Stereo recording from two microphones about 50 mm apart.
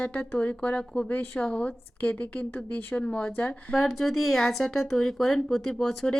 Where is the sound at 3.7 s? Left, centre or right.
Centre.